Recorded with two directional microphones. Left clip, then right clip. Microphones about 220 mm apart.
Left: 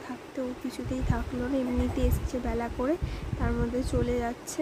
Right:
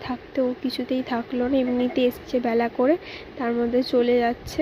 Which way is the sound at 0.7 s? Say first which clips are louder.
Right 8 dB; 15° right (ahead or behind).